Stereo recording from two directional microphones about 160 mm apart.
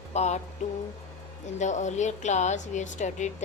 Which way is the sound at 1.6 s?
45° left (ahead or behind).